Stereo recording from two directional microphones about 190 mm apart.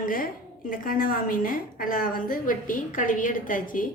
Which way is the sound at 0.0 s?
45° left (ahead or behind).